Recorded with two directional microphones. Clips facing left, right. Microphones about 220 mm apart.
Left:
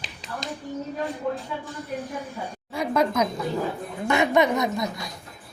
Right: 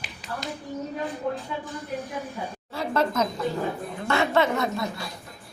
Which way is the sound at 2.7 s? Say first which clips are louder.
Left 2 dB; 15° left (ahead or behind).